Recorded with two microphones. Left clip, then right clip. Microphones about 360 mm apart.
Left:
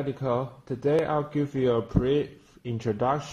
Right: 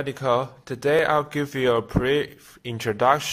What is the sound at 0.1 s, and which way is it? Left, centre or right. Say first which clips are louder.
Speech: right 8 dB; right.